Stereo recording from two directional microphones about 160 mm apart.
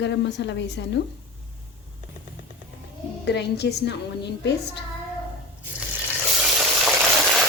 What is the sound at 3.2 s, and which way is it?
A woman's voice, 90° left.